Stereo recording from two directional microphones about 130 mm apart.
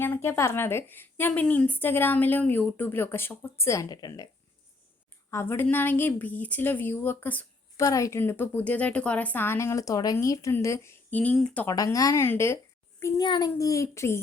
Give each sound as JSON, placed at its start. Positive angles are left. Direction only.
{"t": 0.0, "sound": "a woman's voice", "side_deg": 15}
{"t": 5.3, "sound": "a woman's voice", "side_deg": 20}
{"t": 11.1, "sound": "a woman's voice", "side_deg": 10}
{"t": 11.7, "sound": "a woman's voice", "side_deg": 25}
{"t": 13.2, "sound": "a child's voice", "side_deg": 40}
{"t": 13.6, "sound": "a woman's voice", "side_deg": 25}